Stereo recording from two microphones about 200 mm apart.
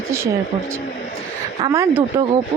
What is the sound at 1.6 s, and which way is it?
Speech, 15° right (ahead or behind).